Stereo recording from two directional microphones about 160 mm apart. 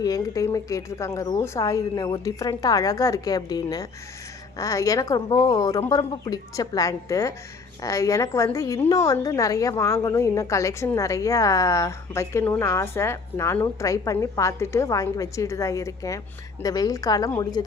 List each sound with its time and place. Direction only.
0.0 s a woman's voice: 20° left (ahead or behind)